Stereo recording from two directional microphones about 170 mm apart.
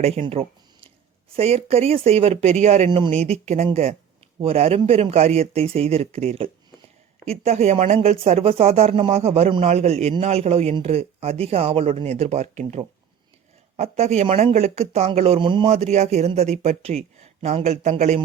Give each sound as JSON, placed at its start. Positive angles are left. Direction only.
{"t": 0.0, "sound": "speech", "side_deg": -35}